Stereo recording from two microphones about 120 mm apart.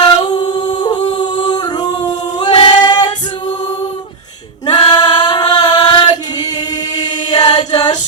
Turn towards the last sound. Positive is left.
turn(degrees=35)  # may be behind; listen again after turning